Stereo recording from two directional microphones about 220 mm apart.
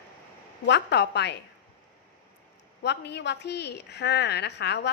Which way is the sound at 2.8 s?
50° left (ahead or behind).